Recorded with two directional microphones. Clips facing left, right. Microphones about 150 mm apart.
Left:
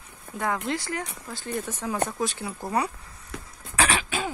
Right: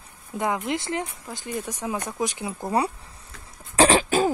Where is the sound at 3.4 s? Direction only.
30° right (ahead or behind).